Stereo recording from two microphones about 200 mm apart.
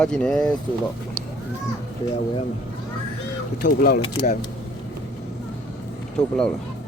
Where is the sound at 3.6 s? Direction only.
45° left (ahead or behind).